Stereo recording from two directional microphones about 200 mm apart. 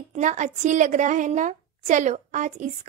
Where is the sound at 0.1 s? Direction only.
40° right (ahead or behind).